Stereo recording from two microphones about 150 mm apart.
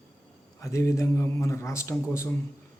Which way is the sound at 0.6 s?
20° left (ahead or behind).